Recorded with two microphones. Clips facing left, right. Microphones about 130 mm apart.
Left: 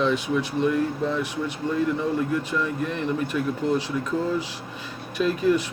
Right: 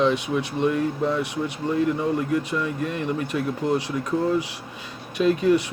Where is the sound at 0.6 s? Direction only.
60° right (ahead or behind).